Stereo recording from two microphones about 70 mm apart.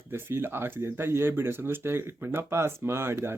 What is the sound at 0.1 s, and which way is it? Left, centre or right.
Speech, right.